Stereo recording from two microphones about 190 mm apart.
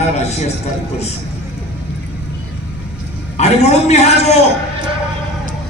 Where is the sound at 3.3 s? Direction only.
35° left (ahead or behind).